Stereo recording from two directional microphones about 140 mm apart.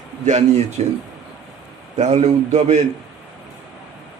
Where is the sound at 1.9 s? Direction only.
50° right (ahead or behind).